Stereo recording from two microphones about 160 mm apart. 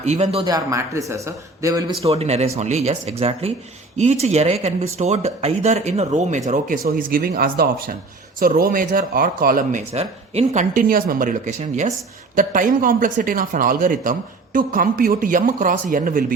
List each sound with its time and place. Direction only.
0.0 s speech: 45° right (ahead or behind)
0.4 s a man's voice: 20° right (ahead or behind)
2.0 s speech: 40° right (ahead or behind)
6.8 s speech: 65° right (ahead or behind)
9.9 s speech: 40° right (ahead or behind); by 16.2 s 60° right (ahead or behind)